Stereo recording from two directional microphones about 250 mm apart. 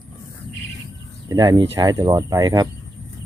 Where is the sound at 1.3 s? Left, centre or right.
Centre.